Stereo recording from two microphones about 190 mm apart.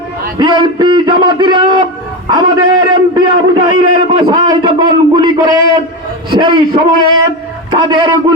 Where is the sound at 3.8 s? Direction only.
25° right (ahead or behind).